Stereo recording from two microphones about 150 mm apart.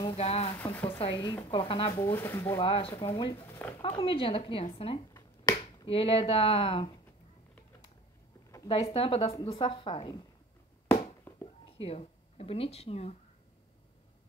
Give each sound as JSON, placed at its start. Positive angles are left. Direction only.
{"t": 0.0, "sound": "speech", "side_deg": 40}
{"t": 2.0, "sound": "speech", "side_deg": 15}
{"t": 2.5, "sound": "speech", "side_deg": 35}
{"t": 3.3, "sound": "speech", "side_deg": 15}
{"t": 3.8, "sound": "speech", "side_deg": 35}
{"t": 8.6, "sound": "speech", "side_deg": 35}
{"t": 11.3, "sound": "a sound", "side_deg": 15}
{"t": 11.8, "sound": "speech", "side_deg": 45}